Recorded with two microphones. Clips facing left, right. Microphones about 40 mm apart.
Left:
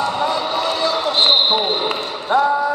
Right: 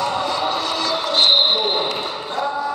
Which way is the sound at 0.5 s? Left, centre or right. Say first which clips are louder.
Left 2 dB; left.